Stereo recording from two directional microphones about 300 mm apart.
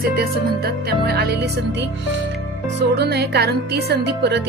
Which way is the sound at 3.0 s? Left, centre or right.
Right.